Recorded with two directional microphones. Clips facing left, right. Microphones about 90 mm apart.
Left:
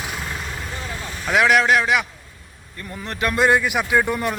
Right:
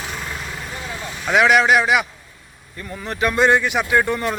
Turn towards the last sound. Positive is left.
turn(degrees=5)  # may be behind; listen again after turning